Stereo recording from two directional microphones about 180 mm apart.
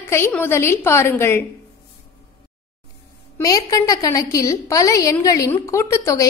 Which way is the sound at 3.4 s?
20° left (ahead or behind).